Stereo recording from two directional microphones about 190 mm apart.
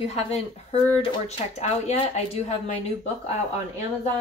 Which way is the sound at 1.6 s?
30° left (ahead or behind).